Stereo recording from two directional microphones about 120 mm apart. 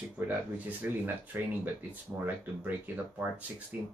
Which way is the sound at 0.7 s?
15° right (ahead or behind).